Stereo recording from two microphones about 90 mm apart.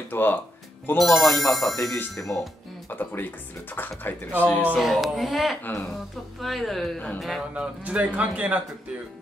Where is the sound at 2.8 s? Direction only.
20° left (ahead or behind).